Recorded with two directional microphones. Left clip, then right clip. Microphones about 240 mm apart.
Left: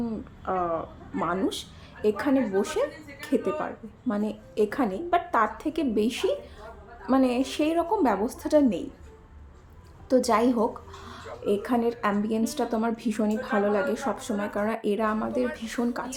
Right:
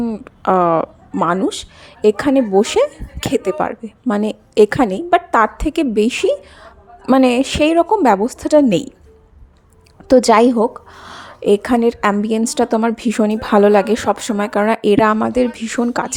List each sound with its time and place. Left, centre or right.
0.0 s speech: right
1.1 s speech: right
10.1 s a woman's voice: right